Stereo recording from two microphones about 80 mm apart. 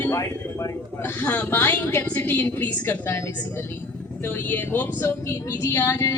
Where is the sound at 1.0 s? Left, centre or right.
Centre.